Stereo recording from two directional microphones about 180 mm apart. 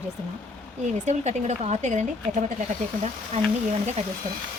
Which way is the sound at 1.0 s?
40° right (ahead or behind).